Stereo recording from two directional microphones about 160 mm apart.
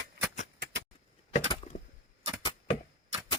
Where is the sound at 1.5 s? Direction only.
40° left (ahead or behind).